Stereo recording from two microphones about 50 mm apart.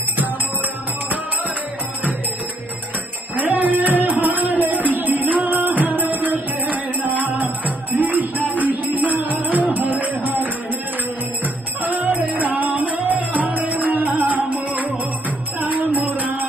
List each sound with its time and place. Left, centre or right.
3.3 s music: right